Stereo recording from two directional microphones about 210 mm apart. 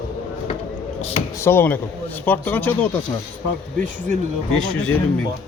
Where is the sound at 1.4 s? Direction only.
10° left (ahead or behind).